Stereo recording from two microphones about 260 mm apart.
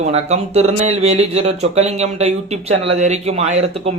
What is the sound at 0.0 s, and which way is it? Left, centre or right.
Speech, right.